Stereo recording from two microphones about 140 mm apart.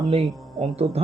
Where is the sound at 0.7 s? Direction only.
45° right (ahead or behind).